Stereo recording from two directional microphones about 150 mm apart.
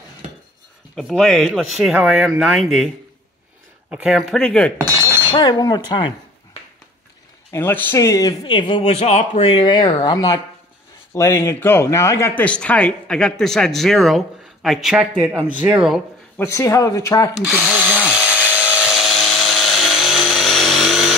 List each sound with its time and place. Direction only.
0.9 s speech: centre (ahead or behind)
3.9 s speech: 5° right (ahead or behind)
4.4 s cutlery: 5° left (ahead or behind)
4.7 s alarm: 15° right (ahead or behind)
5.3 s a man's voice: 35° left (ahead or behind)
7.5 s a man's voice: 15° left (ahead or behind); by 16.0 s 5° right (ahead or behind)
16.3 s speech: 20° left (ahead or behind)
17.6 s a sound: 10° right (ahead or behind)
18.9 s wood: centre (ahead or behind)
20.1 s vehicle: centre (ahead or behind)